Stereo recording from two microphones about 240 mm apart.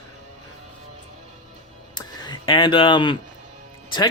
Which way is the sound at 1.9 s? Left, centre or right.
Centre.